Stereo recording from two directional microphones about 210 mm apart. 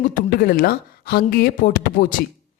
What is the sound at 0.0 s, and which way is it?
A man's voice, 45° left (ahead or behind).